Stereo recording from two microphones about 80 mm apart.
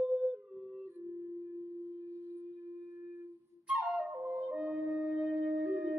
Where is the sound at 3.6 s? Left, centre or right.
Centre.